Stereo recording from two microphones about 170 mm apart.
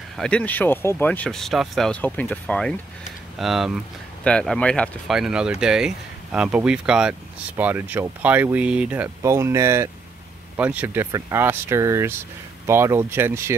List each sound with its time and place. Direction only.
0.2 s speech: 5° left (ahead or behind); by 13.6 s 15° right (ahead or behind)